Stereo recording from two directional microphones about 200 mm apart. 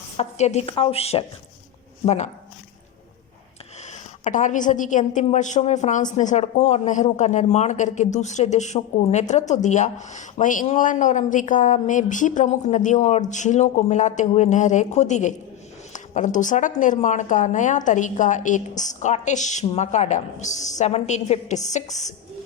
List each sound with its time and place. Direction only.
0.2 s a woman's voice: 35° left (ahead or behind)
4.2 s a woman's voice: 40° left (ahead or behind)